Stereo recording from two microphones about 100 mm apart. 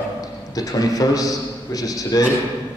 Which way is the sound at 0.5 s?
35° left (ahead or behind).